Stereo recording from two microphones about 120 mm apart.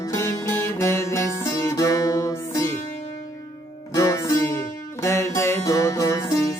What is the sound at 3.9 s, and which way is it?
Music, 25° left (ahead or behind).